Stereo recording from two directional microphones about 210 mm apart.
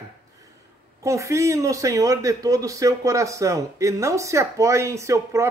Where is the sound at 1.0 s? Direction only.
15° right (ahead or behind).